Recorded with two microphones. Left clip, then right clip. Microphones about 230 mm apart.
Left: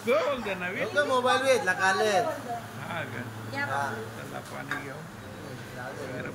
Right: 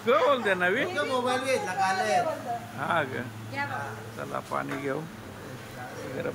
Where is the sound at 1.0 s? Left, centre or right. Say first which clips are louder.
Left 3 dB; centre.